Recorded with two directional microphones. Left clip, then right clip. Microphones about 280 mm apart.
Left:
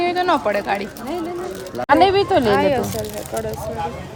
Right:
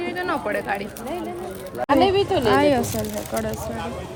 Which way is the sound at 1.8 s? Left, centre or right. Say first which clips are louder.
Left 4 dB; left.